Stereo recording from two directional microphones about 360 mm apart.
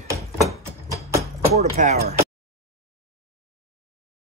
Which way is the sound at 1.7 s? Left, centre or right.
Centre.